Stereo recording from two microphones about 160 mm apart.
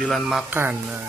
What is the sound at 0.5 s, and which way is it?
Speech, 15° right (ahead or behind).